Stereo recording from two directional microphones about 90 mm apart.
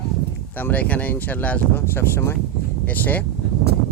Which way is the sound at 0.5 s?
15° left (ahead or behind).